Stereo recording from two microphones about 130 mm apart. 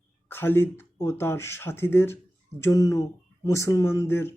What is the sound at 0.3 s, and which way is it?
Speech, 15° left (ahead or behind).